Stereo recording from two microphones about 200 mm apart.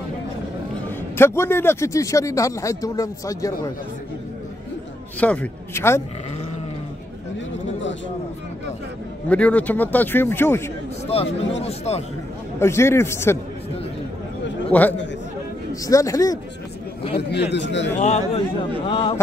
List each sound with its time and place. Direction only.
1.1 s a man's voice: 10° left (ahead or behind)
5.2 s a man's voice: 5° left (ahead or behind)
9.3 s a man's voice: 5° left (ahead or behind)
11.6 s a man's voice: 30° left (ahead or behind)
12.5 s a man's voice: 15° left (ahead or behind)
14.7 s a man's voice: 10° left (ahead or behind)
17.3 s speech: 60° left (ahead or behind)
17.9 s a man's voice: 35° left (ahead or behind)